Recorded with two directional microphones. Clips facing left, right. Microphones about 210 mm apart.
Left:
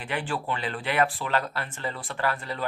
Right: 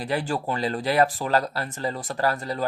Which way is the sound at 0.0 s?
40° right (ahead or behind).